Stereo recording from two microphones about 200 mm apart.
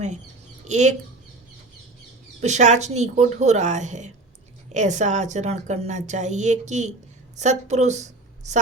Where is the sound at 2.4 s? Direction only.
35° right (ahead or behind).